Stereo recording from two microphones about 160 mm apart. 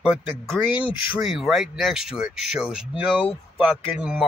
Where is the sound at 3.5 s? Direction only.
5° right (ahead or behind).